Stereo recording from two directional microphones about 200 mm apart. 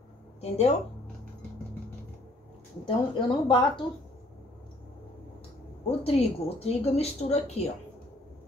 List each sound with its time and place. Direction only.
0.4 s speech: 30° left (ahead or behind)
2.8 s speech: 25° left (ahead or behind)
5.9 s speech: 30° left (ahead or behind)